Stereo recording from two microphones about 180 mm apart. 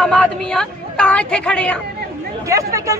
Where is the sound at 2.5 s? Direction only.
15° right (ahead or behind).